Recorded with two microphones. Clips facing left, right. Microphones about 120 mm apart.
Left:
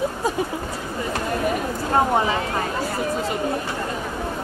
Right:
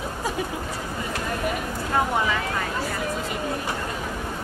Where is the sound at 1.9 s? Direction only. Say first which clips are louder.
Left 4 dB; 30° left (ahead or behind).